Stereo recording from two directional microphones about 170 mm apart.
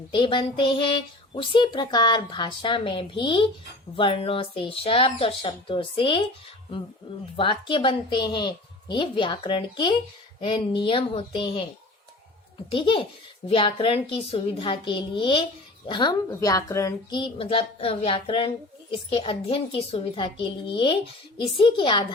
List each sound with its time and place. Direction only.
0.1 s a woman's voice: 30° left (ahead or behind)
7.3 s a woman's voice: 30° left (ahead or behind)
12.7 s a child's voice: 30° left (ahead or behind)